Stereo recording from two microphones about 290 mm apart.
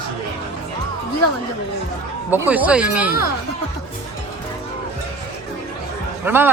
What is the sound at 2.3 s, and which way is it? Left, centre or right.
Speech, centre.